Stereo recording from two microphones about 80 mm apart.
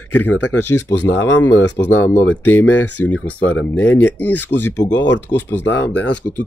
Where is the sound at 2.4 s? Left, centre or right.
Left.